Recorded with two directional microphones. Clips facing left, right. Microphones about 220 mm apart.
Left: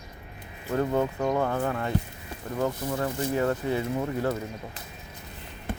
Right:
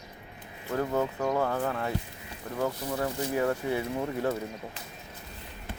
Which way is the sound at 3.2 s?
10° right (ahead or behind).